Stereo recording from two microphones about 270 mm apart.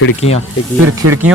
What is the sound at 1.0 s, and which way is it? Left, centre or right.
Speech, right.